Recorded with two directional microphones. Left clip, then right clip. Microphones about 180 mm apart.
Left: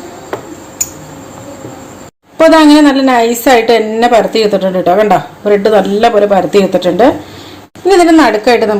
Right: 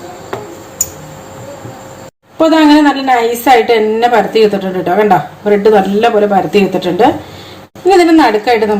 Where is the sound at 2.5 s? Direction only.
35° left (ahead or behind).